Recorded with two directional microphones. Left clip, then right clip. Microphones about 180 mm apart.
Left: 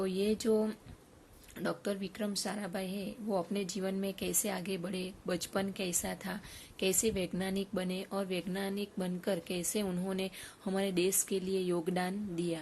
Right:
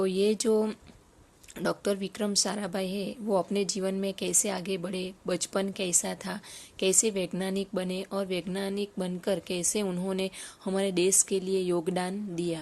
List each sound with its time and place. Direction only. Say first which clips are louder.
0.0 s a woman's voice: right 7 dB; 30° right (ahead or behind)